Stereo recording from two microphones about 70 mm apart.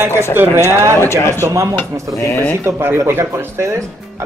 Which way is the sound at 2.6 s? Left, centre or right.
Right.